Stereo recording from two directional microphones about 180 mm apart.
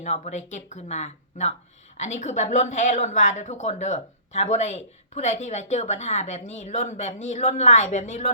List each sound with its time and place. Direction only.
0.0 s speech: 40° left (ahead or behind)